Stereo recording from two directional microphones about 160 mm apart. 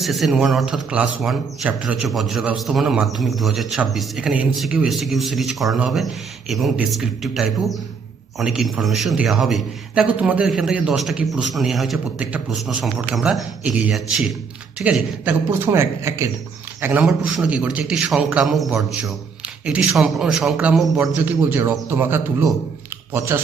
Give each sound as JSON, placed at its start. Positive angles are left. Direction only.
{"t": 0.0, "sound": "a man's voice", "side_deg": 0}
{"t": 21.2, "sound": "speech", "side_deg": -15}